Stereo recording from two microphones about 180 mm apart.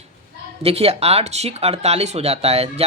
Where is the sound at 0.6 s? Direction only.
35° right (ahead or behind).